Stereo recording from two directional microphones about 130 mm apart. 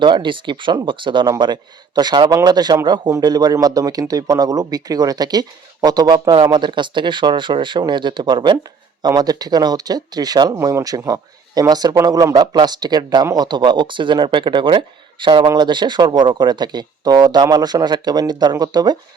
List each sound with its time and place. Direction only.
0.0 s speech: 35° right (ahead or behind)